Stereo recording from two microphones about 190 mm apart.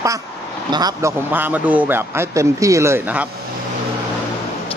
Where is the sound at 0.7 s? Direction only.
20° right (ahead or behind).